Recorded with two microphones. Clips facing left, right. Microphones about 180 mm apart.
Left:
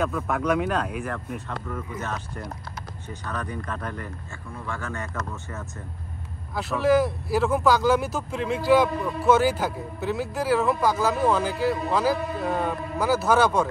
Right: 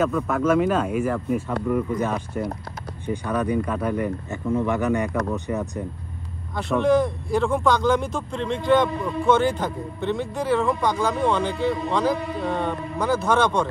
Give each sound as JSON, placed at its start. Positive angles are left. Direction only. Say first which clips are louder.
{"t": 0.0, "sound": "speech", "louder": "right 4 dB", "side_deg": 0}
{"t": 6.5, "sound": "speech", "louder": "right 2 dB", "side_deg": 5}